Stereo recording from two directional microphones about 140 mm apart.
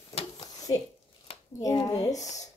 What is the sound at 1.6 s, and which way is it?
Speech, 25° left (ahead or behind).